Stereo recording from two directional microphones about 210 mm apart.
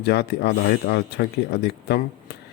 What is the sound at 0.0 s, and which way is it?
Speech, 50° left (ahead or behind).